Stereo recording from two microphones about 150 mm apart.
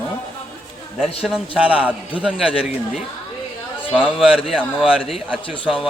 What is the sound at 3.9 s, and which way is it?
A man's voice, 5° right (ahead or behind).